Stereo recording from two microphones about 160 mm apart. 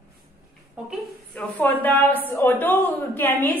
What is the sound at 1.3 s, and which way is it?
A woman's voice, 10° left (ahead or behind).